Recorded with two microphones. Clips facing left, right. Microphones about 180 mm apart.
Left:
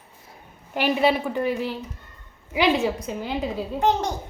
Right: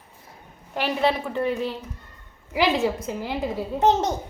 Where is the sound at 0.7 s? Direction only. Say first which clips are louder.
Left 2 dB; 10° left (ahead or behind).